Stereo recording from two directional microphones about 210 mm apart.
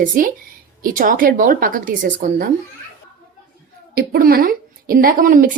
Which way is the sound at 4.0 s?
45° right (ahead or behind).